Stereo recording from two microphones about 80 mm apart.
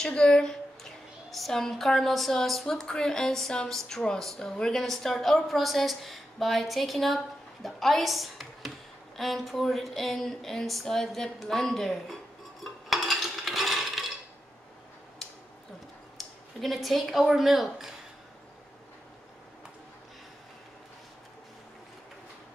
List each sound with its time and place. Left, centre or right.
0.0 s a woman's voice: centre
12.6 s a sound: centre
16.2 s speech: centre